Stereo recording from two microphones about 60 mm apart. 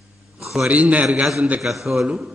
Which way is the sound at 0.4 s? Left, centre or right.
Centre.